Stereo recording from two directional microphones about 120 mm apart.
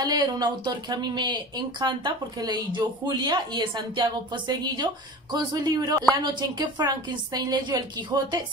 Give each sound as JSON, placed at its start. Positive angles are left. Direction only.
{"t": 0.0, "sound": "speech", "side_deg": -35}